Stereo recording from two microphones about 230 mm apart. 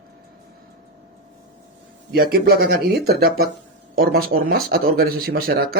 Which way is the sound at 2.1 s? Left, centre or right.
Right.